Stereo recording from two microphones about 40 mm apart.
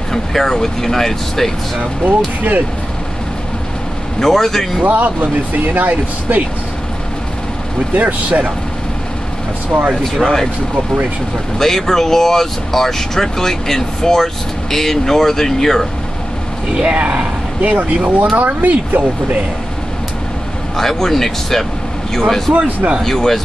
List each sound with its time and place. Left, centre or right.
0.1 s speech: centre
2.0 s speech: right
4.2 s speech: centre
4.8 s speech: right
7.9 s speech: right
9.7 s speech: right
10.0 s speech: centre
11.5 s speech: centre
16.7 s speech: right
17.6 s speech: right
20.7 s speech: centre
22.5 s speech: right
23.0 s speech: centre